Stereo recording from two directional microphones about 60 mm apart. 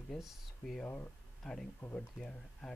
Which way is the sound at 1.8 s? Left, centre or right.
Left.